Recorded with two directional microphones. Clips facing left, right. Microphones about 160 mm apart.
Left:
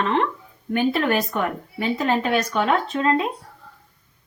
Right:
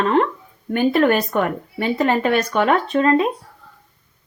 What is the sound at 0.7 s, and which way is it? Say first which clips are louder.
A woman's voice: right 4 dB; 55° right (ahead or behind).